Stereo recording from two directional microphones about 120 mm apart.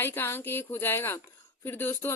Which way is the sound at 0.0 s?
20° left (ahead or behind).